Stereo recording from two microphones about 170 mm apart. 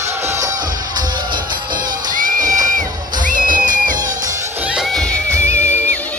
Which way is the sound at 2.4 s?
20° right (ahead or behind).